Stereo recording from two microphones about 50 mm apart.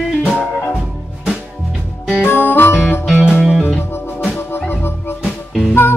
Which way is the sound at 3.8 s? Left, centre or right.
Left.